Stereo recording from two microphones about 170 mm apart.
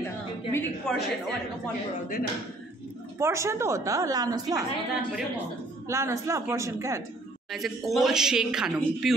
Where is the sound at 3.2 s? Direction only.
15° right (ahead or behind).